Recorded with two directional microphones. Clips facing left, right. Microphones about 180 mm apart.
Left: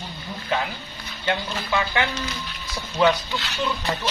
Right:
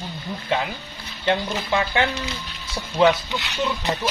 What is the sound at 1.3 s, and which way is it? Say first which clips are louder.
Speech: right 3 dB; 25° right (ahead or behind).